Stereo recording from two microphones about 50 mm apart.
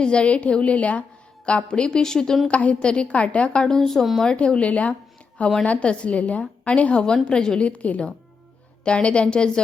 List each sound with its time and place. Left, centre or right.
0.0 s a woman's voice: left
2.5 s a woman's voice: left
3.8 s a woman's voice: centre
4.2 s a woman's voice: centre
7.7 s a woman's voice: left